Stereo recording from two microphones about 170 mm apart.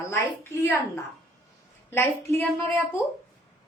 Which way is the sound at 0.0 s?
15° left (ahead or behind).